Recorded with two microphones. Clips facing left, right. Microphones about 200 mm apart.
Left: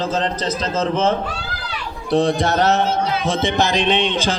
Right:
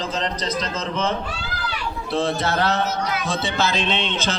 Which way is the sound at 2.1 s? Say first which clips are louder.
Left 6 dB; 20° left (ahead or behind).